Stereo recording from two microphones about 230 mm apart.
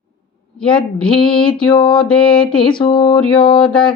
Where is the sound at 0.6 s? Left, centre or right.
Centre.